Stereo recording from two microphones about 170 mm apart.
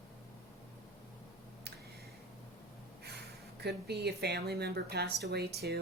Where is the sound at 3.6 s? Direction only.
75° right (ahead or behind).